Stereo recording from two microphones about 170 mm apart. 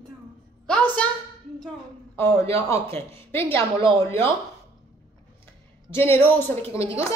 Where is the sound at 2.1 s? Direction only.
15° left (ahead or behind).